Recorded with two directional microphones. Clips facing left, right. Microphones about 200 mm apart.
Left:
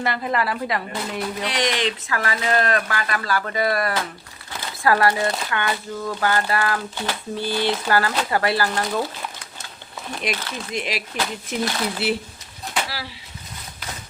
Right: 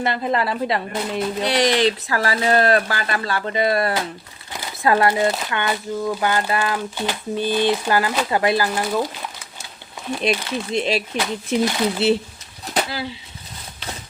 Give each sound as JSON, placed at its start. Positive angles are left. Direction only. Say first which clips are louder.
{"t": 0.0, "sound": "speech", "louder": "right 2 dB", "side_deg": -25}
{"t": 10.2, "sound": "speech", "louder": "right 6 dB", "side_deg": -30}